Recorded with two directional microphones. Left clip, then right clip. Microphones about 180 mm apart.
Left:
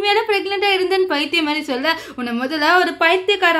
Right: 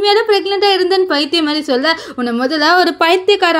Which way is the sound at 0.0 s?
20° right (ahead or behind).